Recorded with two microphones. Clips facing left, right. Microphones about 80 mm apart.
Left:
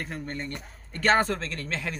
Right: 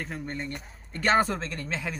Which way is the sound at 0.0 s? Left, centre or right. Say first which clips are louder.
Even; centre.